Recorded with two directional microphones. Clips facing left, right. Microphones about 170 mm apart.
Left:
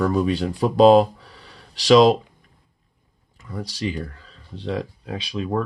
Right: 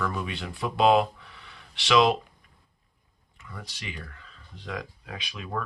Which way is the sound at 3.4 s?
35° left (ahead or behind).